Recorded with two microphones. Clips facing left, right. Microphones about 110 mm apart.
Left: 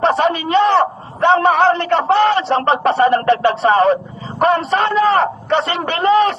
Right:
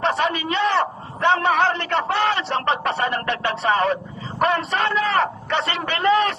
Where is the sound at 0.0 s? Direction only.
30° left (ahead or behind).